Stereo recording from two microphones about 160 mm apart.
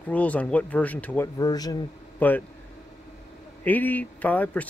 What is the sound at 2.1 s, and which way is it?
Speech, 10° left (ahead or behind).